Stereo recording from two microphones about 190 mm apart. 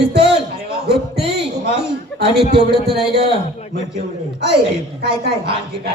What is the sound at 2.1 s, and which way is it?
A man's voice, 60° right (ahead or behind).